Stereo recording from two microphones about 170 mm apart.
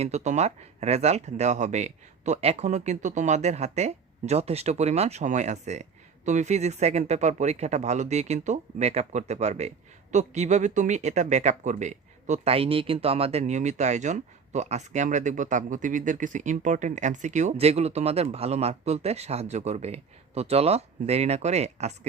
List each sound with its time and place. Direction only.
0.0 s speech: 40° right (ahead or behind)